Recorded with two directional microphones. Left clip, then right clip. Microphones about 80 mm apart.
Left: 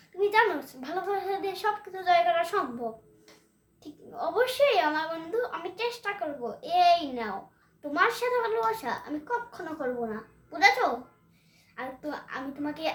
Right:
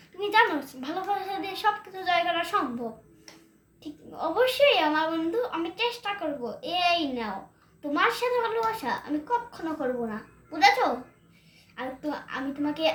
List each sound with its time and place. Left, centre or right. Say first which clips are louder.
0.2 s speech: right 1 dB; left
4.1 s a child's voice: right 2 dB; left